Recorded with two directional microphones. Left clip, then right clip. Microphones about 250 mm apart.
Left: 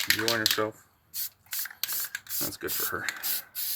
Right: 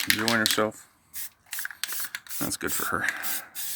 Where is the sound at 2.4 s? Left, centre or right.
Right.